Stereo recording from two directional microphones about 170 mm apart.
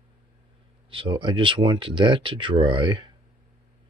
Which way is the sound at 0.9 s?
30° right (ahead or behind).